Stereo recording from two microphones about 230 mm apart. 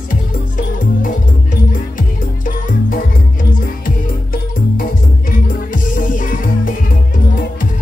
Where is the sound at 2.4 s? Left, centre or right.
Left.